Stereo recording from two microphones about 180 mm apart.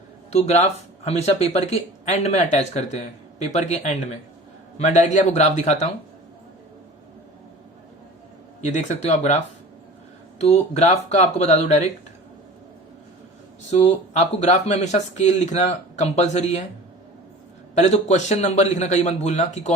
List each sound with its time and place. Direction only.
0.3 s speech: 35° left (ahead or behind)
8.6 s speech: 40° left (ahead or behind)
13.7 s speech: 40° left (ahead or behind)
17.7 s speech: 40° left (ahead or behind)